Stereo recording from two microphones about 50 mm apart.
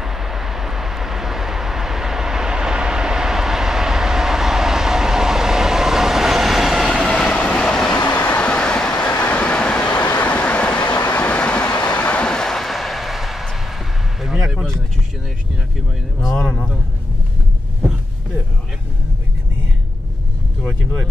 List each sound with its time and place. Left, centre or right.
0.0 s vehicle: centre
7.2 s vehicle: left
8.0 s vehicle: left
8.4 s vehicle: left
9.1 s train: left; by 13.6 s centre
16.2 s a sound: centre